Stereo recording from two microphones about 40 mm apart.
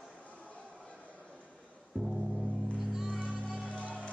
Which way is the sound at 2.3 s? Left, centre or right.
Centre.